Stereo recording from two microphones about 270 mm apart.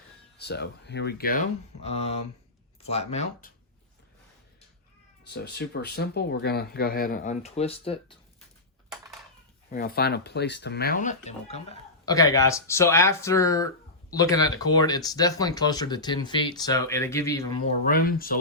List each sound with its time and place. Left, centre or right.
0.4 s speech: left
5.3 s speech: left
9.7 s speech: left; by 17.6 s centre
17.8 s speech: left